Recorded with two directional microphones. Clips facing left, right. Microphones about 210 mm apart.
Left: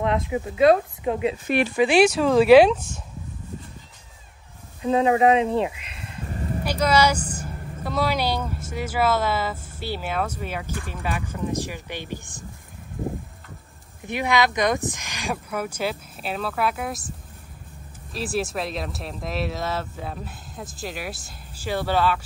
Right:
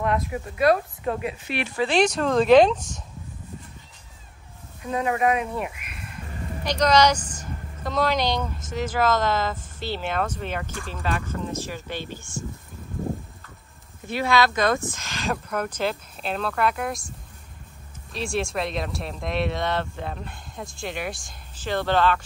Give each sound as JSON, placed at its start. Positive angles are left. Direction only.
{"t": 0.0, "sound": "speech", "side_deg": 20}
{"t": 1.8, "sound": "speech", "side_deg": 10}
{"t": 4.8, "sound": "speech", "side_deg": 25}
{"t": 6.6, "sound": "speech", "side_deg": 10}
{"t": 14.0, "sound": "speech", "side_deg": 15}
{"t": 18.1, "sound": "speech", "side_deg": 5}